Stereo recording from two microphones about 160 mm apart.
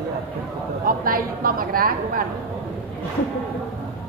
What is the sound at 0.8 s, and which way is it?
A woman's voice, 65° right (ahead or behind).